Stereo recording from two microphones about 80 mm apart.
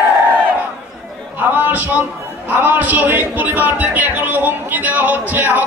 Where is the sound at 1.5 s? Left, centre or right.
Right.